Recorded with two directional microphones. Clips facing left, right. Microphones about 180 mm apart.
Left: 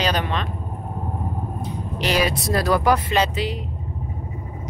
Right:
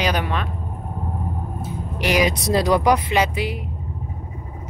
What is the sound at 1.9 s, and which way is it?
Speech, 15° right (ahead or behind).